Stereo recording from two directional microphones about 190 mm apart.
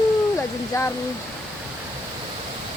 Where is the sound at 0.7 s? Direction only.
15° left (ahead or behind).